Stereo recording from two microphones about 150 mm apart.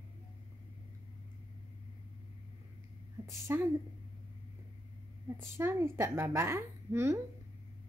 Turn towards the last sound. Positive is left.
turn(degrees=-20)  # may be behind; listen again after turning